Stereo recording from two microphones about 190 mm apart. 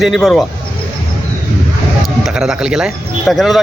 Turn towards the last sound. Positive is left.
turn(degrees=0)  # may be behind; listen again after turning